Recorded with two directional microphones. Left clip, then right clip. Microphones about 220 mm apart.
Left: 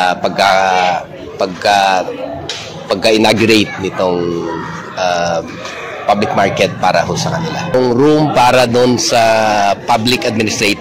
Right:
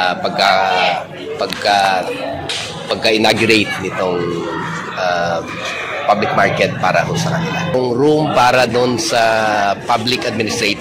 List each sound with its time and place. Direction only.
0.0 s a man's voice: 50° left (ahead or behind)